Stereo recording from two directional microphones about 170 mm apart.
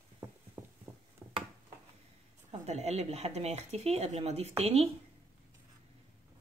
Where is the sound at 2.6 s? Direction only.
40° right (ahead or behind).